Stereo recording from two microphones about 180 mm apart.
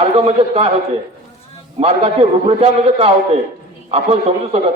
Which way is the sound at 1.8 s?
35° right (ahead or behind).